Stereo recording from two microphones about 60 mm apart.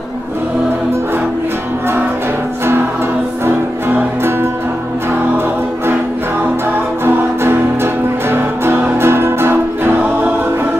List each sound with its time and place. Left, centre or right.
7.1 s music: right